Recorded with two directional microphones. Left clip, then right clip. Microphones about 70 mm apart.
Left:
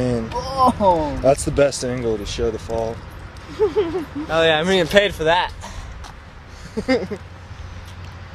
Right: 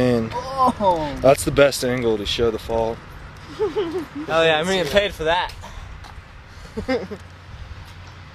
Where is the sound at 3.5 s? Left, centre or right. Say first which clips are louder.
Left 4 dB; centre.